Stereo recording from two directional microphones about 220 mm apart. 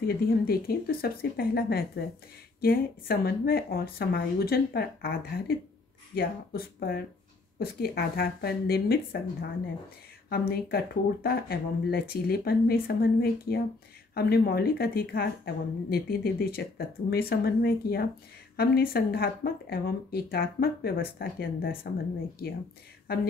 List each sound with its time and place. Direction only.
0.0 s speech: 45° left (ahead or behind)